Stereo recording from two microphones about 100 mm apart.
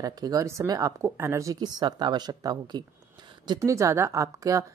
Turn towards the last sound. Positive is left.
turn(degrees=-35)  # may be behind; listen again after turning